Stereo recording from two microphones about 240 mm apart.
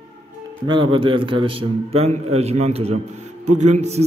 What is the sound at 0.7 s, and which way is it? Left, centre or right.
A man's voice, right.